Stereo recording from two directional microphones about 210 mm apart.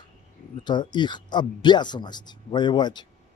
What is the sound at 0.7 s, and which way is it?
Speech, 20° left (ahead or behind).